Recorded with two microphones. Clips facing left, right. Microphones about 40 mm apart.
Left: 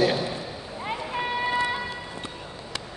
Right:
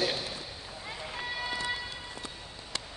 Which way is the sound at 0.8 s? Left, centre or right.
Left.